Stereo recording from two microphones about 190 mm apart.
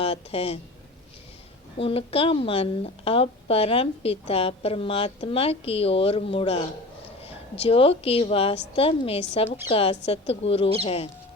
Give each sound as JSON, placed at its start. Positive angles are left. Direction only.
{"t": 0.0, "sound": "speech", "side_deg": 30}
{"t": 1.8, "sound": "a woman's voice", "side_deg": 30}